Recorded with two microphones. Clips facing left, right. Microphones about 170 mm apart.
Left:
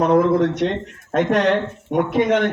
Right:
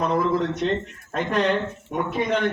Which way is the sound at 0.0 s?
70° left (ahead or behind).